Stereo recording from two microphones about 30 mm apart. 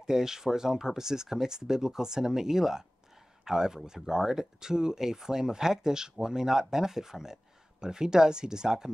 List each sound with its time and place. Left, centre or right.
0.1 s speech: centre